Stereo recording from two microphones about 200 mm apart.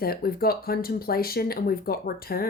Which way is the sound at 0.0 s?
50° left (ahead or behind).